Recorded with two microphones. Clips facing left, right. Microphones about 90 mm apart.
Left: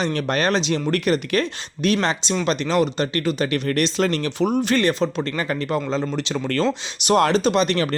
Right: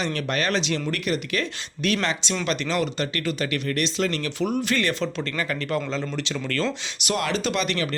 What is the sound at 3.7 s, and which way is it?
Speech, 45° left (ahead or behind).